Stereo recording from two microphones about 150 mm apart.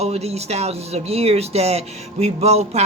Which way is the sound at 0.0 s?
45° right (ahead or behind).